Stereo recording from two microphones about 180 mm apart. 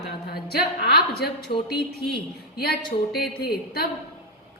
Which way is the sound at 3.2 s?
60° left (ahead or behind).